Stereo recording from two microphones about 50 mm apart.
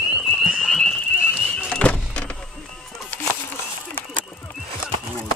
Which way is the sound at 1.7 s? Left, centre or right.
Left.